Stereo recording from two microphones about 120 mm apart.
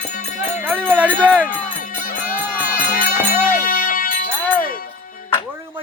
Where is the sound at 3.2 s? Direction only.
15° right (ahead or behind).